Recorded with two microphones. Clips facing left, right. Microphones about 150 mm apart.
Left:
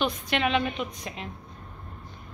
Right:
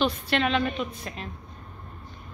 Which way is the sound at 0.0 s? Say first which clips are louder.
Right 2 dB; 10° left (ahead or behind).